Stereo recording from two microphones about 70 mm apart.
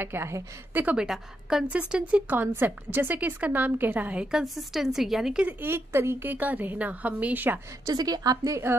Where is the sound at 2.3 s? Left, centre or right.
Right.